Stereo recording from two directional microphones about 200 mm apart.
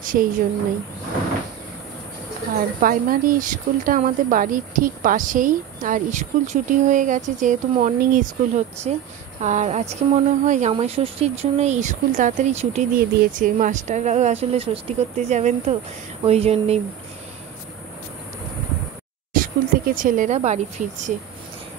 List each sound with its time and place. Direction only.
0.0 s a woman's voice: 45° right (ahead or behind)
2.8 s speech: 45° right (ahead or behind)
19.3 s speech: 45° right (ahead or behind)